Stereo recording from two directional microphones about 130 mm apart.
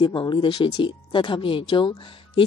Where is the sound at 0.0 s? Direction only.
35° left (ahead or behind).